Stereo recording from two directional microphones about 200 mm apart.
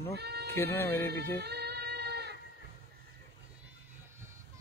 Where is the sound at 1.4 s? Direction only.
55° right (ahead or behind).